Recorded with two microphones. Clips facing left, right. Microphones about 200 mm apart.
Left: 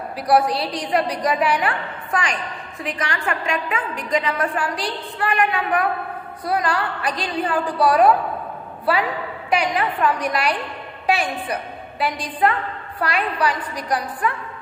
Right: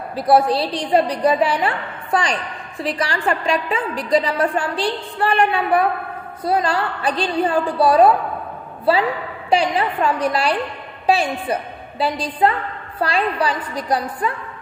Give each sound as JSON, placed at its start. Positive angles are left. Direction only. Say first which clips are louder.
{"t": 0.1, "sound": "a woman's voice", "louder": "right 3 dB", "side_deg": -25}